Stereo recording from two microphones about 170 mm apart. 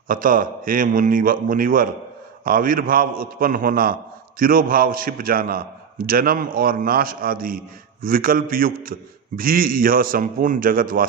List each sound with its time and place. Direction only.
0.1 s a man's voice: 55° right (ahead or behind)